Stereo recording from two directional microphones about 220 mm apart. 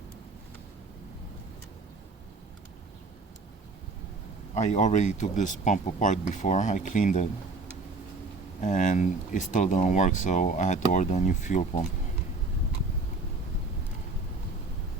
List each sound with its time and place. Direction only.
4.5 s speech: 30° left (ahead or behind)
8.6 s speech: 35° left (ahead or behind)